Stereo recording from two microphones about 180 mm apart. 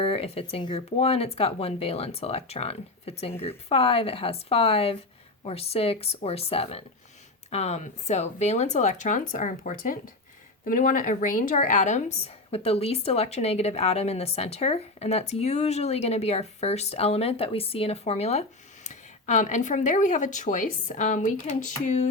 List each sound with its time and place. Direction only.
0.0 s a woman's voice: 35° left (ahead or behind)